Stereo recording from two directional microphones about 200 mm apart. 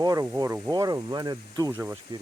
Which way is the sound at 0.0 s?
20° right (ahead or behind).